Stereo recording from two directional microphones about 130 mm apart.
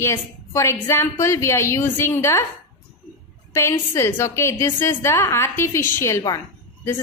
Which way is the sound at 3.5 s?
20° left (ahead or behind).